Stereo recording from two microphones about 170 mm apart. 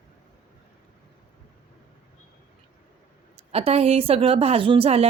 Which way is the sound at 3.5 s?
35° right (ahead or behind).